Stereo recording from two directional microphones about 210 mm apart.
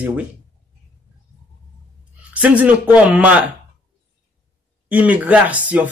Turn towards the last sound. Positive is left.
turn(degrees=-5)  # may be behind; listen again after turning